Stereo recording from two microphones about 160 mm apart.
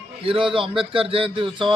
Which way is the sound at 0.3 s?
35° right (ahead or behind).